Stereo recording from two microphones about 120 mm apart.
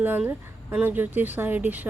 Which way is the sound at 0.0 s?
15° right (ahead or behind).